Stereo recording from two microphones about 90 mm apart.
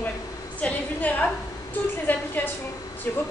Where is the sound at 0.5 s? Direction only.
15° left (ahead or behind).